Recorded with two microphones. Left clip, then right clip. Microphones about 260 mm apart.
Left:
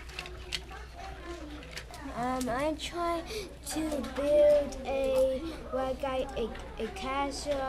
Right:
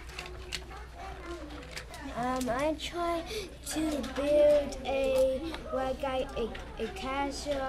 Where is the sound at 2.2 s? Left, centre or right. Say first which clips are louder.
Right 1 dB; centre.